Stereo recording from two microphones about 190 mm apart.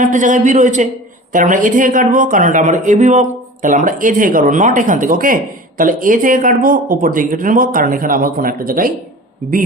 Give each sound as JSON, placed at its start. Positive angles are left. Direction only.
{"t": 0.0, "sound": "speech", "side_deg": -40}